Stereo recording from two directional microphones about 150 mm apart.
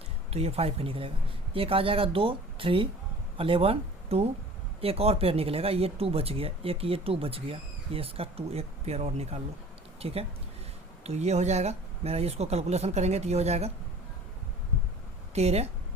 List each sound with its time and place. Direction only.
0.3 s speech: 45° right (ahead or behind)
15.4 s speech: 45° right (ahead or behind)